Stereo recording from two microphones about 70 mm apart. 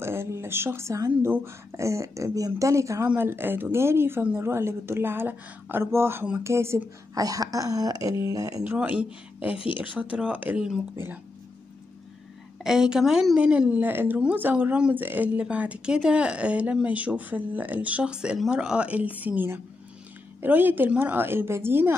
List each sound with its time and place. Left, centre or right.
0.0 s a woman's voice: right
3.2 s speech: right
7.2 s speech: right
8.7 s speech: right
12.6 s speech: centre
13.4 s speech: centre
13.7 s speech: right